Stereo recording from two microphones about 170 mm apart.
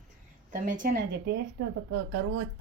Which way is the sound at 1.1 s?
85° right.